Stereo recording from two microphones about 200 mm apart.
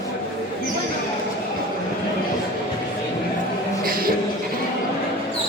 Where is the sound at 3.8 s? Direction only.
45° right (ahead or behind).